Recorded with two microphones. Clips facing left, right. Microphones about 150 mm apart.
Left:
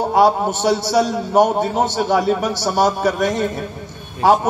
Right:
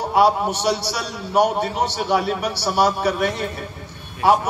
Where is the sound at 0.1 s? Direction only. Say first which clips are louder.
Left 1 dB; 45° left (ahead or behind).